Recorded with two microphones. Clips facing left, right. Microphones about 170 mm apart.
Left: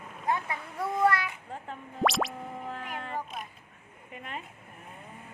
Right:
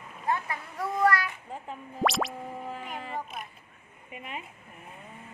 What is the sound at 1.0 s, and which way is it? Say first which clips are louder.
Speech: right 1 dB; 25° left (ahead or behind).